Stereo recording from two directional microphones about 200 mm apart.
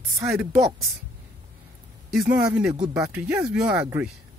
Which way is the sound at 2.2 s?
5° right (ahead or behind).